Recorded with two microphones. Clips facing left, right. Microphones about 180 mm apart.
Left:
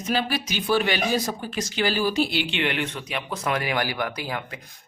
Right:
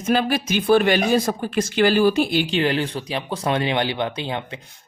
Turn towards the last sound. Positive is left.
turn(degrees=-25)  # may be behind; listen again after turning